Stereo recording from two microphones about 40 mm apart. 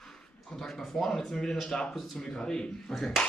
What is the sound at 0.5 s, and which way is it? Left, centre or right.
Speech, centre.